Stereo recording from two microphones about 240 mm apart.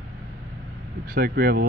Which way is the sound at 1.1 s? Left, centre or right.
Right.